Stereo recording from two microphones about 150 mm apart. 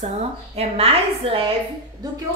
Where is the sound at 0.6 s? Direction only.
40° right (ahead or behind).